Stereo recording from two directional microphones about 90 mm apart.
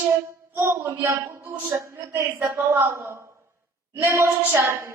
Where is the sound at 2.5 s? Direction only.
25° right (ahead or behind).